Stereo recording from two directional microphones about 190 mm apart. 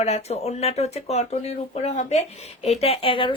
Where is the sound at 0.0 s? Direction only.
35° left (ahead or behind).